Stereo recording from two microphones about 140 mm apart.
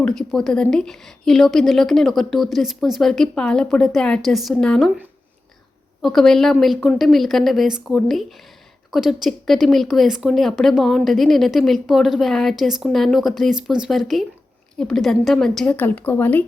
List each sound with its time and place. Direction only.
0.0 s speech: 5° left (ahead or behind)
6.0 s a woman's voice: 5° left (ahead or behind)